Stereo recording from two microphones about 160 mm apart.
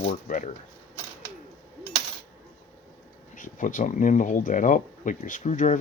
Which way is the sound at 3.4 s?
55° left (ahead or behind).